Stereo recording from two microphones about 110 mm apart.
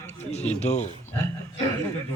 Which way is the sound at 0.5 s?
85° left.